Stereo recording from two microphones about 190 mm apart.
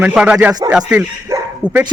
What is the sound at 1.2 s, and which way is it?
Dog, 15° right (ahead or behind).